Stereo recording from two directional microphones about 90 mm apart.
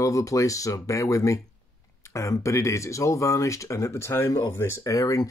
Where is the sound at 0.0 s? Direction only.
40° left (ahead or behind).